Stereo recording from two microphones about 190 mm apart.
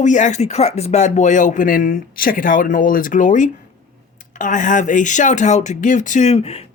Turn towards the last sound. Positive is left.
turn(degrees=30)  # may be behind; listen again after turning